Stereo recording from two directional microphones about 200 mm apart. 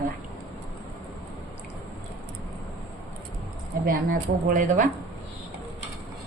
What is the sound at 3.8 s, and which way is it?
Speech, 45° right (ahead or behind).